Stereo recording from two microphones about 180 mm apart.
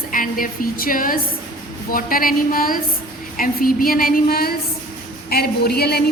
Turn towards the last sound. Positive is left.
turn(degrees=60)  # may be behind; listen again after turning